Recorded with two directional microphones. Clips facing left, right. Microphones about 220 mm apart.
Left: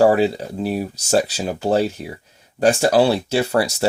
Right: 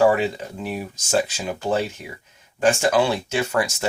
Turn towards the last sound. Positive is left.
turn(degrees=35)  # may be behind; listen again after turning